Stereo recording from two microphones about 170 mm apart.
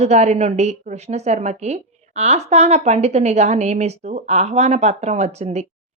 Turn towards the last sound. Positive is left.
turn(degrees=-40)  # may be behind; listen again after turning